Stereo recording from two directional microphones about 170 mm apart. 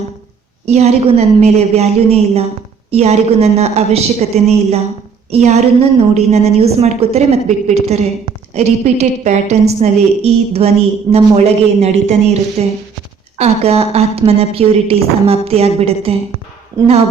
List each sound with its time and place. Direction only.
0.6 s a woman's voice: 40° right (ahead or behind)